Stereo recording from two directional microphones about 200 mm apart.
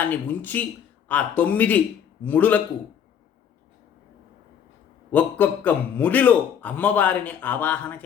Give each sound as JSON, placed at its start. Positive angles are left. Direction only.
{"t": 0.1, "sound": "a man's voice", "side_deg": 10}
{"t": 5.1, "sound": "a man's voice", "side_deg": 10}